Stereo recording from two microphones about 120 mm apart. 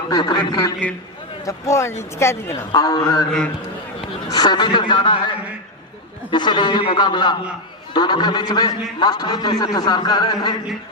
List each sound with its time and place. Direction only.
0.1 s a man's voice: 35° left (ahead or behind)
2.9 s a man's voice: 35° left (ahead or behind)
4.3 s a man's voice: 35° left (ahead or behind)
6.3 s a man's voice: 40° left (ahead or behind)